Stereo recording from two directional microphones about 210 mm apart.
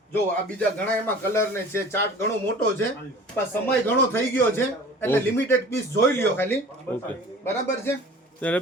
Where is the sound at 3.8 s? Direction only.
10° left (ahead or behind).